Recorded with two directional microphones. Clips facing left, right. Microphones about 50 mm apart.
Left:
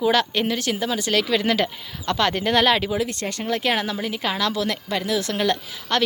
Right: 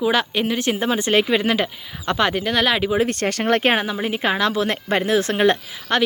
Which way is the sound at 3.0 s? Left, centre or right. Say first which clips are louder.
Right 6 dB; right.